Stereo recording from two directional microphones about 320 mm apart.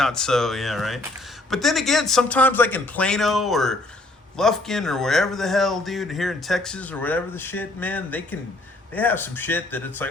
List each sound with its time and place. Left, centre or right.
0.0 s a man's voice: centre